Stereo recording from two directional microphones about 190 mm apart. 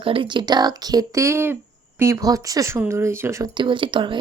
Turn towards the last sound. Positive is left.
turn(degrees=-25)  # may be behind; listen again after turning